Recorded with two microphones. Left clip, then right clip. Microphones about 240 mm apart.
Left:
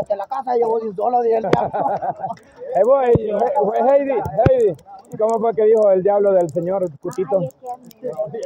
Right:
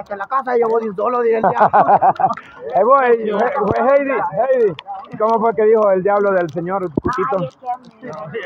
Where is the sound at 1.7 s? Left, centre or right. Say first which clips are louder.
Right 9 dB; right.